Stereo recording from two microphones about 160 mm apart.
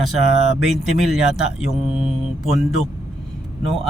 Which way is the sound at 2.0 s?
Centre (ahead or behind).